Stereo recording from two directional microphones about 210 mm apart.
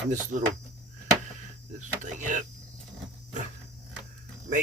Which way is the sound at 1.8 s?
35° right (ahead or behind).